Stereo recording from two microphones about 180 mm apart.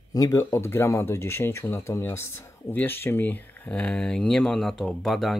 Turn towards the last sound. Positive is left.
turn(degrees=0)  # may be behind; listen again after turning